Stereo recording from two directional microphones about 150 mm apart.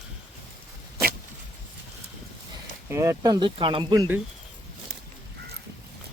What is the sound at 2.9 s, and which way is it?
Speech, 20° right (ahead or behind).